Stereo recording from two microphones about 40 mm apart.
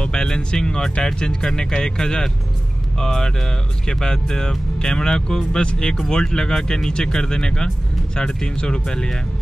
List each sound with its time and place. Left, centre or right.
0.0 s speech: centre